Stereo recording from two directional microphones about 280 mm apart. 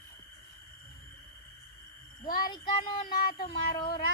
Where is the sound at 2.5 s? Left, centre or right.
Centre.